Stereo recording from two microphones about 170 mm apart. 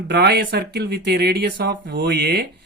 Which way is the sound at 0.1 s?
75° right (ahead or behind).